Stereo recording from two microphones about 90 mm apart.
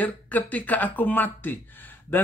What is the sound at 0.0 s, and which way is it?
Speech, 20° left (ahead or behind).